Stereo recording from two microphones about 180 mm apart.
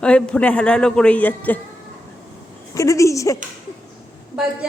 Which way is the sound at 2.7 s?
15° left (ahead or behind).